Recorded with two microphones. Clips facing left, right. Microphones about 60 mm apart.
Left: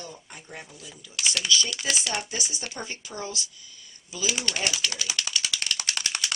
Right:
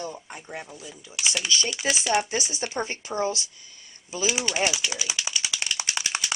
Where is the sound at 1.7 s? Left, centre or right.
Centre.